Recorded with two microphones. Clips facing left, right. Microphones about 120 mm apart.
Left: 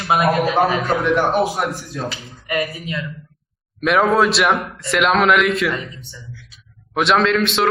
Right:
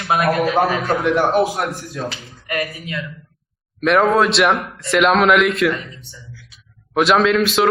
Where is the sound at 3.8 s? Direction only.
Centre (ahead or behind).